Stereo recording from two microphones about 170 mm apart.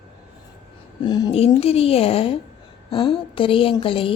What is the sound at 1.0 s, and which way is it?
Speech, 25° left (ahead or behind).